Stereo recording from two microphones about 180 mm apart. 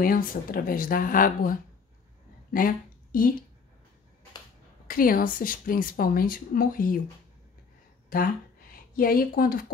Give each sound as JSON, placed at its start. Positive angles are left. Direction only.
{"t": 0.0, "sound": "a woman's voice", "side_deg": 50}
{"t": 4.8, "sound": "a woman's voice", "side_deg": 50}
{"t": 8.1, "sound": "a woman's voice", "side_deg": 50}